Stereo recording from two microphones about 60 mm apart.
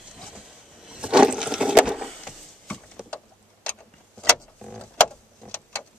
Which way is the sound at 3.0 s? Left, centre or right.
Centre.